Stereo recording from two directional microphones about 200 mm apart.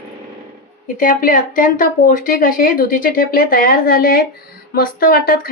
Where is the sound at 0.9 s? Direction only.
40° left (ahead or behind).